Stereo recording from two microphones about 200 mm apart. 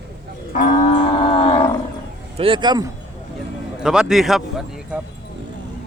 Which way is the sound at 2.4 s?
25° right (ahead or behind).